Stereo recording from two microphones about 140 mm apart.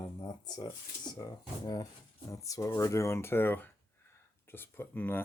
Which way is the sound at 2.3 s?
25° left (ahead or behind).